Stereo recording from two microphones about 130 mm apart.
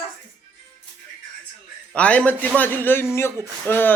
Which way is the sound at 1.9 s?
10° left (ahead or behind).